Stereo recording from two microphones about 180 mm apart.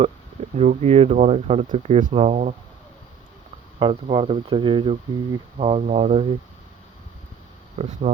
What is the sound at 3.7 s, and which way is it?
Speech, 30° right (ahead or behind).